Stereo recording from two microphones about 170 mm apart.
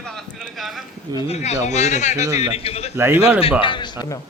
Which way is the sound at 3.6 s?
30° left (ahead or behind).